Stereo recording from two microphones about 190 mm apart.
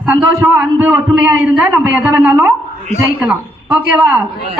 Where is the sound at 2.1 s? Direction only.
10° right (ahead or behind).